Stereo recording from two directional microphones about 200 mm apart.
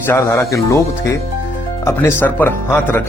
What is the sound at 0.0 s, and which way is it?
Speech, 15° left (ahead or behind).